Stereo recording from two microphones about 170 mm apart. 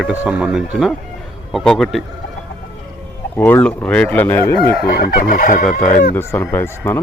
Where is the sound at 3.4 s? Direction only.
10° left (ahead or behind).